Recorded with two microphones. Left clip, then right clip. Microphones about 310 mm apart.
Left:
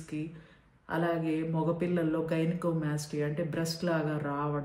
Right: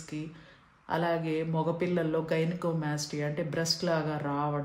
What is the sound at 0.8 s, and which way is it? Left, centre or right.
Speech, right.